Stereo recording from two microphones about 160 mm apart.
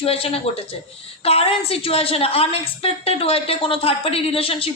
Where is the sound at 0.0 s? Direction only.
35° left (ahead or behind).